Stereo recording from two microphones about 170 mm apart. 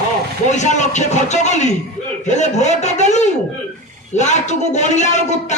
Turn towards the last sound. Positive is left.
turn(degrees=45)  # may be behind; listen again after turning